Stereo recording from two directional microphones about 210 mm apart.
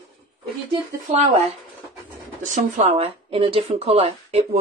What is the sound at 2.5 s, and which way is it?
Speech, 30° right (ahead or behind).